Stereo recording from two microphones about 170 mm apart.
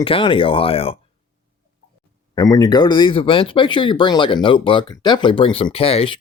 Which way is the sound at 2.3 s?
20° left (ahead or behind).